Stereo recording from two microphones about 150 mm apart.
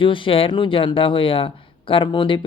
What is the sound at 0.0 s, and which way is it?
Speech, 35° left (ahead or behind).